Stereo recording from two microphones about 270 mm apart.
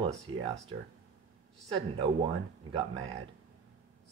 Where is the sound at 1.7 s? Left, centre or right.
Centre.